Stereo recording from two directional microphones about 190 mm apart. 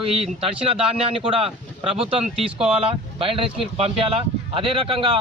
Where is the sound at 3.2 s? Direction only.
30° right (ahead or behind).